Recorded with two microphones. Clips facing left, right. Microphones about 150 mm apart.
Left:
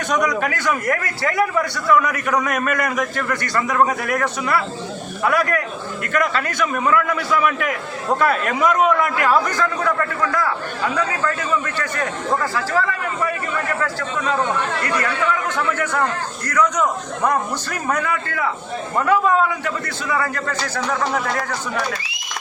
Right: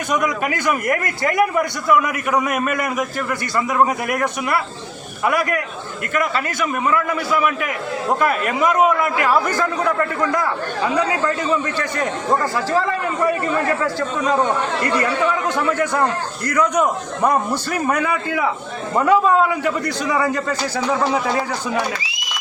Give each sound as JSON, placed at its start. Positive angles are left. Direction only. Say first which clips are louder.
{"t": 0.1, "sound": "a man's voice", "louder": "even", "side_deg": -10}
{"t": 10.9, "sound": "a man's voice", "louder": "right 4 dB", "side_deg": -20}
{"t": 14.9, "sound": "a man's voice", "louder": "right 2 dB", "side_deg": -15}